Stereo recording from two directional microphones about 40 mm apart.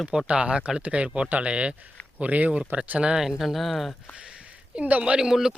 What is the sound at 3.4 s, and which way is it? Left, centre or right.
Speech, centre.